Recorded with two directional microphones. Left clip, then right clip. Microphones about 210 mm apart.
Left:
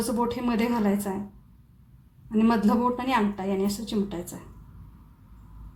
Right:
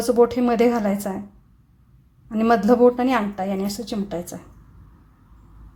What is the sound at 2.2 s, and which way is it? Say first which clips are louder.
A woman's voice: right 7 dB; 40° right (ahead or behind).